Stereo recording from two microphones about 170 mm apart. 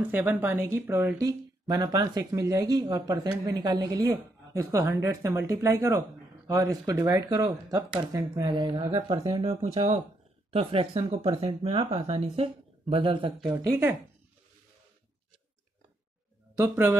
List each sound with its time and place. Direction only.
0.0 s speech: 10° right (ahead or behind)
9.4 s speech: 35° right (ahead or behind)
13.6 s speech: 15° right (ahead or behind)
16.5 s speech: 10° right (ahead or behind)